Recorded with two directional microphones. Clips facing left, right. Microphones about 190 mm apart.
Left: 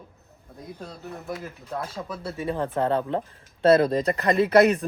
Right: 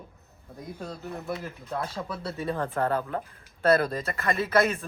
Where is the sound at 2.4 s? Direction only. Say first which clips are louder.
Left 3 dB; 15° left (ahead or behind).